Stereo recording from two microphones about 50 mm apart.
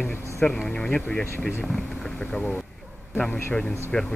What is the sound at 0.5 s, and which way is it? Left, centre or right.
Speech, centre.